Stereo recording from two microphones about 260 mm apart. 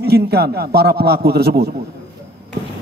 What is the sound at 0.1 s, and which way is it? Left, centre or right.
A man's voice, right.